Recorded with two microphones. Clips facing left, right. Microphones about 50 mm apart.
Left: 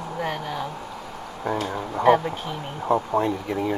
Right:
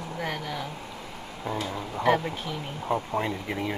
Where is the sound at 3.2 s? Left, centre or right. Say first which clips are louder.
Left 5 dB; right.